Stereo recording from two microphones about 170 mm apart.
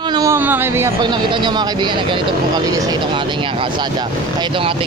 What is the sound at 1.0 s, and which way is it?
Speech, 25° right (ahead or behind).